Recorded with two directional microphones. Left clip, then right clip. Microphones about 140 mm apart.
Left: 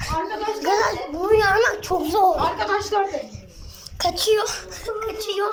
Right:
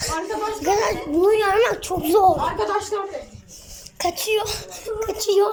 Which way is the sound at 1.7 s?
25° right (ahead or behind).